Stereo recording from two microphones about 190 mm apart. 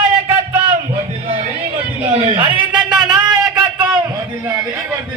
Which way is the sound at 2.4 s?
25° right (ahead or behind).